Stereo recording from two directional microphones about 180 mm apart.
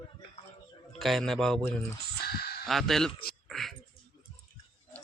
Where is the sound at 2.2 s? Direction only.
60° left (ahead or behind).